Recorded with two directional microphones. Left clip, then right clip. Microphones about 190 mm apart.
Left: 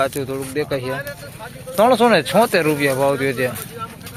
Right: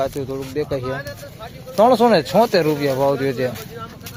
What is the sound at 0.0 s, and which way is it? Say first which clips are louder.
Speech: left 2 dB; 5° right (ahead or behind).